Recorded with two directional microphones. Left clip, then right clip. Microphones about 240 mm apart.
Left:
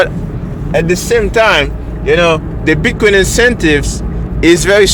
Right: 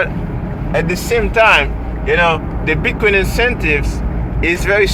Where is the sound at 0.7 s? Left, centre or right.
Left.